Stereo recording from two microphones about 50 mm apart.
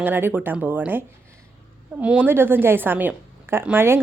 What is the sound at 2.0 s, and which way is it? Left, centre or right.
Speech, right.